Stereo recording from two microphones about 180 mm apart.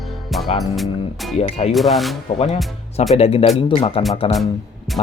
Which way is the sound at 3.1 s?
35° left (ahead or behind).